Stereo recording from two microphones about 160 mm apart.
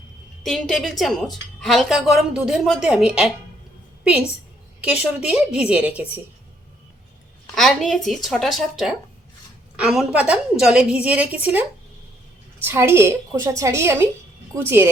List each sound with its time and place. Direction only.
0.4 s a woman's voice: centre (ahead or behind)
5.2 s a woman's voice: 5° right (ahead or behind)
7.5 s a woman's voice: centre (ahead or behind)
12.6 s a woman's voice: 15° right (ahead or behind)